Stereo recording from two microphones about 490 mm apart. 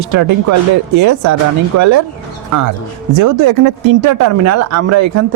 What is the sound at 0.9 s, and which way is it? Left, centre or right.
Speech, right.